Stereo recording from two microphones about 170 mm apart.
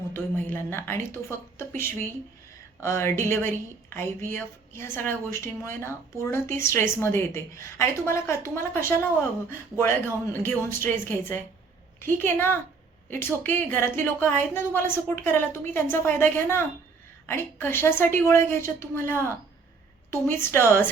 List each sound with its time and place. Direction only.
0.1 s a woman's voice: 10° left (ahead or behind)